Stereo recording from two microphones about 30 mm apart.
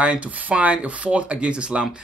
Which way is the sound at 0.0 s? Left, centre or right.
Right.